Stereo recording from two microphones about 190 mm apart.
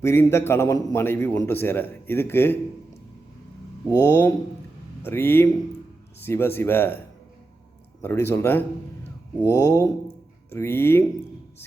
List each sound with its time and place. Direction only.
0.0 s a man's voice: 10° left (ahead or behind)
3.8 s a man's voice: 15° left (ahead or behind)
8.0 s a man's voice: 15° left (ahead or behind)